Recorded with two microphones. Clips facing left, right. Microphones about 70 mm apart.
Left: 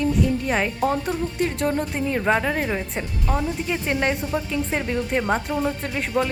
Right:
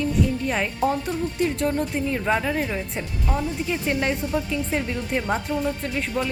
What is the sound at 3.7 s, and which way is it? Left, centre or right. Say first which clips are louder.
Speech: left 1 dB; left.